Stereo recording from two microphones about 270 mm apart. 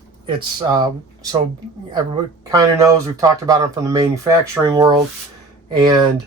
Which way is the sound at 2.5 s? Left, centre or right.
Centre.